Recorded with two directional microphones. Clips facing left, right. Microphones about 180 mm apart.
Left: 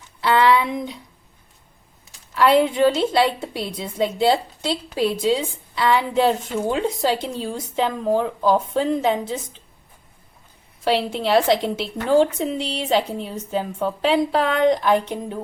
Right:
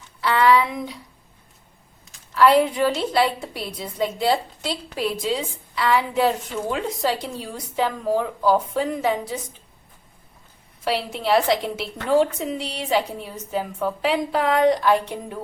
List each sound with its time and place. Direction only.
0.2 s a sound: 25° left (ahead or behind)
2.3 s a woman's voice: 25° left (ahead or behind)
10.8 s a woman's voice: 30° left (ahead or behind)